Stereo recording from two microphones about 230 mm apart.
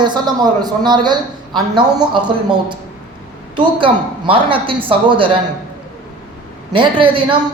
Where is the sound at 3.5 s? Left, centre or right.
Right.